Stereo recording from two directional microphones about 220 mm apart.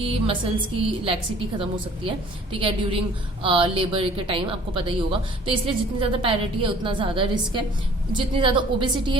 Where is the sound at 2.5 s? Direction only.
25° right (ahead or behind).